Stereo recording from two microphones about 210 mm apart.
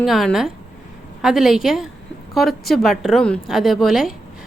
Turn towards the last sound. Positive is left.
turn(degrees=0)  # may be behind; listen again after turning